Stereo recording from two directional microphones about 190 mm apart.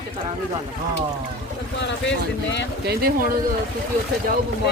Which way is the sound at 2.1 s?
65° left (ahead or behind).